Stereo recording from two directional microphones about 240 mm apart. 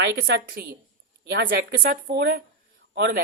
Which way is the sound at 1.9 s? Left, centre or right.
Right.